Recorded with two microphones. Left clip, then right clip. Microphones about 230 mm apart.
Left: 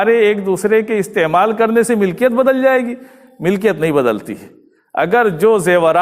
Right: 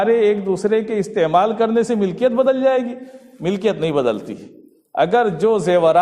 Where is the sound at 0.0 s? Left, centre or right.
Left.